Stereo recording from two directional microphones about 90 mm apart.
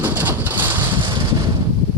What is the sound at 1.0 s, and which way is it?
Wind noise, 50° right (ahead or behind).